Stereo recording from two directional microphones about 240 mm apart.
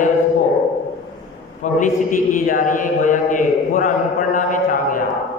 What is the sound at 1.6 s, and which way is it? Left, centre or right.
A man's voice, left.